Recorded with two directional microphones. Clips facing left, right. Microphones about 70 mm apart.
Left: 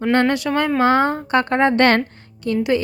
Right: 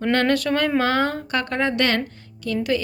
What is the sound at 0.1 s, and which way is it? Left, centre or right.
Speech, centre.